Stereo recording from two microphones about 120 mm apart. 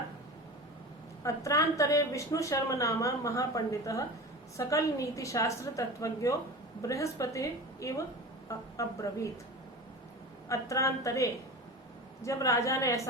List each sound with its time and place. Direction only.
1.2 s a woman's voice: 25° left (ahead or behind)
10.5 s a woman's voice: 25° left (ahead or behind)